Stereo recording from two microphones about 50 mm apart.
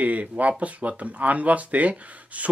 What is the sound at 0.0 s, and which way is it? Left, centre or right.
Speech, right.